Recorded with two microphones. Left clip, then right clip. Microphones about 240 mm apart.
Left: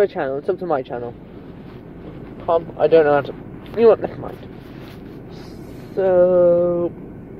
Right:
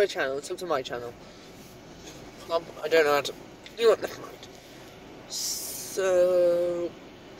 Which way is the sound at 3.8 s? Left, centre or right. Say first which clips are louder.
Left 9 dB; centre.